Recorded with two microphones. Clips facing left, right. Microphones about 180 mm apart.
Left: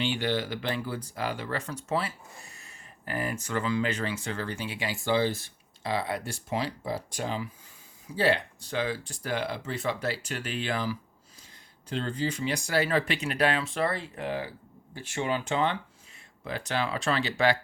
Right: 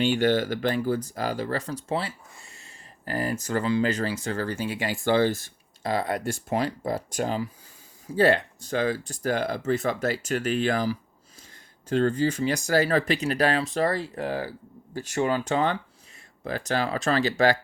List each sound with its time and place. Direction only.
0.0 s speech: 45° right (ahead or behind)